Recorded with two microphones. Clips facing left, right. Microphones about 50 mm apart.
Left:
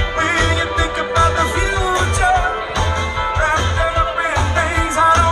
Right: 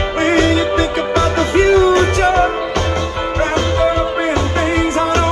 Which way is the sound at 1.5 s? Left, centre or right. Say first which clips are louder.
Right 7 dB; right.